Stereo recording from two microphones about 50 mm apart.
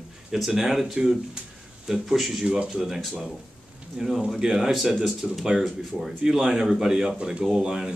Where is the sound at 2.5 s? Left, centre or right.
Centre.